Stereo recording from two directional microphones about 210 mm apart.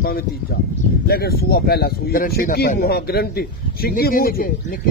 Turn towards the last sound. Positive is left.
turn(degrees=45)  # may be behind; listen again after turning